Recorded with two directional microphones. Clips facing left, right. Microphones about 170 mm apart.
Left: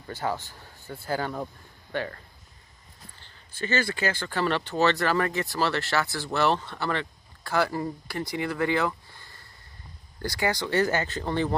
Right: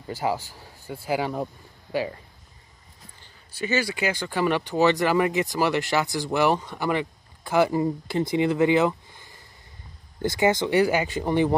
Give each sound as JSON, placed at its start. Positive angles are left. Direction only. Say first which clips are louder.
{"t": 0.1, "sound": "speech", "louder": "right 4 dB", "side_deg": -10}
{"t": 3.2, "sound": "speech", "louder": "right 3 dB", "side_deg": -10}